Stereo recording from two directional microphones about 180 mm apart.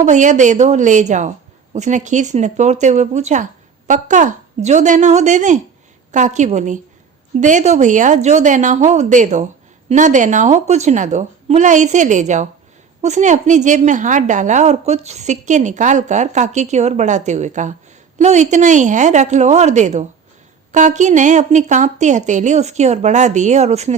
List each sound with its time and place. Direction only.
0.0 s a woman's voice: 45° right (ahead or behind)